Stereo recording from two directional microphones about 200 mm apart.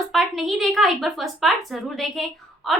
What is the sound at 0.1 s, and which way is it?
A woman's voice, centre (ahead or behind).